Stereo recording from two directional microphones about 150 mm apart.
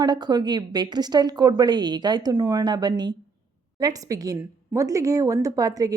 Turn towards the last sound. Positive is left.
turn(degrees=-25)  # may be behind; listen again after turning